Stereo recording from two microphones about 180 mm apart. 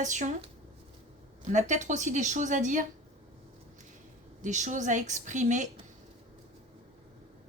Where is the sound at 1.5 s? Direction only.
40° right (ahead or behind).